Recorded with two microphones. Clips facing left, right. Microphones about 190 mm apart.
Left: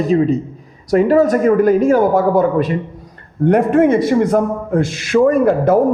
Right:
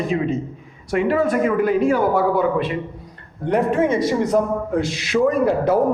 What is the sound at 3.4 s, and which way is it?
A man's voice, 55° left (ahead or behind).